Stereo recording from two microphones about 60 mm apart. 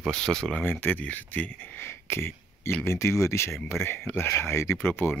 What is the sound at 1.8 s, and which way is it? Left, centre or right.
Speech, left.